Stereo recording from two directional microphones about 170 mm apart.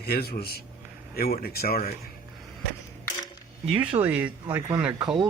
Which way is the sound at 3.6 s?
5° right (ahead or behind).